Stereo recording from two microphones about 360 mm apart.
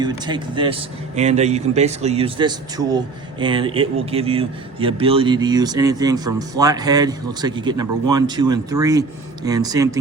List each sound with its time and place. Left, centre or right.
0.0 s a man's voice: centre